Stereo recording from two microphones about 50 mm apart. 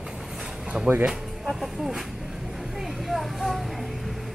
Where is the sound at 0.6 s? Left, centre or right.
Centre.